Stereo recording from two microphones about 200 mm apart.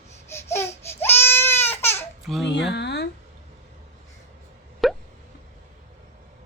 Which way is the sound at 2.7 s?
55° left (ahead or behind).